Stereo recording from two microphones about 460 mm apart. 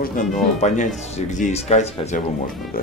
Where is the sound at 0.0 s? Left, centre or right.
Centre.